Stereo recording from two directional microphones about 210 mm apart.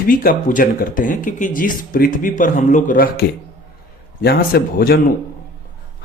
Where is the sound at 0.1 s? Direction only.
40° left (ahead or behind).